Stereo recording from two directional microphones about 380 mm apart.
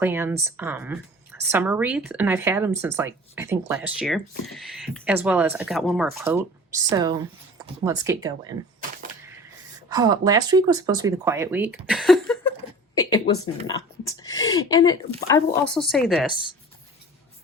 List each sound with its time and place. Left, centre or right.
0.0 s speech: centre
9.9 s speech: centre
11.9 s a sound: centre
14.0 s speech: centre